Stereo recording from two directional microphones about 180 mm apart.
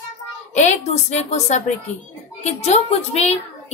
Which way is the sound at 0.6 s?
40° left (ahead or behind).